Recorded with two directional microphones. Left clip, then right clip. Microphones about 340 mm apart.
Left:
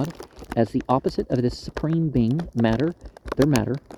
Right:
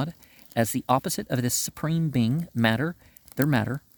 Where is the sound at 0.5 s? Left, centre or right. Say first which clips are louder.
Left 2 dB; right.